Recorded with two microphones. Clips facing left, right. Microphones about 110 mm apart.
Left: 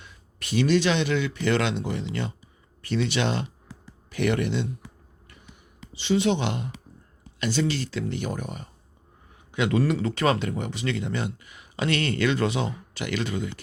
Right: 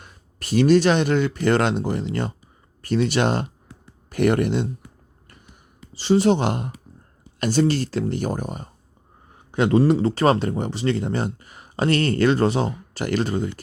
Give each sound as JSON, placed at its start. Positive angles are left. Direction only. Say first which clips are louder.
{"t": 0.0, "sound": "speech", "louder": "right 2 dB", "side_deg": -45}
{"t": 5.9, "sound": "speech", "louder": "right 5 dB", "side_deg": -40}